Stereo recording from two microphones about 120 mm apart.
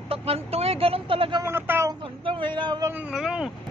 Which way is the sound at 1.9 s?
45° right (ahead or behind).